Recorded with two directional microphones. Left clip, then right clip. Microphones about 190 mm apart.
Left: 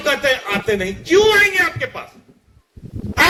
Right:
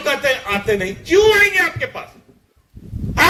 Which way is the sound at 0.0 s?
50° left (ahead or behind).